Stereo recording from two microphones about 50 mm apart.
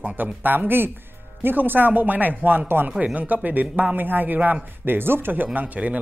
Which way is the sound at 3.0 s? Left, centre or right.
Right.